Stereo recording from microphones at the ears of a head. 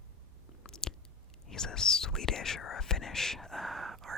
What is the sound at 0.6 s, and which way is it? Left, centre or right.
Chewing, left.